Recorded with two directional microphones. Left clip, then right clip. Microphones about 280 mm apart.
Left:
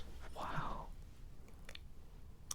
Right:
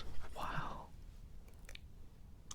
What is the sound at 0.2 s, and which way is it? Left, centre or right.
Whispering, centre.